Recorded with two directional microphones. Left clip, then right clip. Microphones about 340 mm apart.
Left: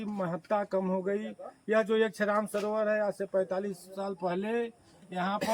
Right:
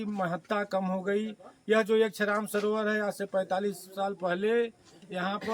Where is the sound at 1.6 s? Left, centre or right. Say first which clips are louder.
Right 2 dB; centre.